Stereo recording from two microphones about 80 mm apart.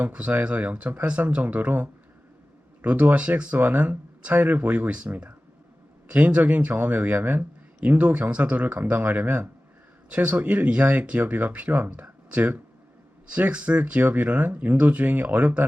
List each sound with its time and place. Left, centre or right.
0.0 s speech: centre